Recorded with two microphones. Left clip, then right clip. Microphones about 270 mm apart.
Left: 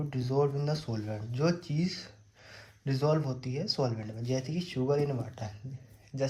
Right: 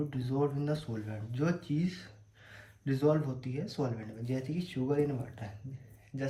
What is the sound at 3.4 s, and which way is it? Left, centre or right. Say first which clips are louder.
Speech: left 5 dB; left.